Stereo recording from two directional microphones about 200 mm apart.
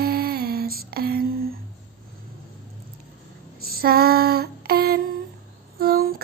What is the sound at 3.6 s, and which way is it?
Female singing, 50° right (ahead or behind).